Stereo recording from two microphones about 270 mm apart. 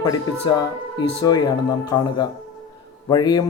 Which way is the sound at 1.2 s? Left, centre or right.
Centre.